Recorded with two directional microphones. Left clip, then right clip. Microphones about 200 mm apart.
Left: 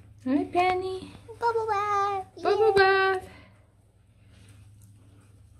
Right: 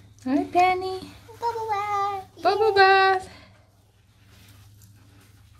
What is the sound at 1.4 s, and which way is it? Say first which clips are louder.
Child singing: left 1 dB; 40° left (ahead or behind).